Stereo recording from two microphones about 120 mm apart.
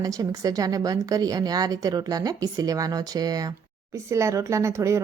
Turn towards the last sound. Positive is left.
turn(degrees=-25)  # may be behind; listen again after turning